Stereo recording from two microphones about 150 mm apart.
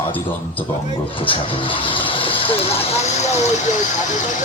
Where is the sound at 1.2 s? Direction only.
35° left (ahead or behind).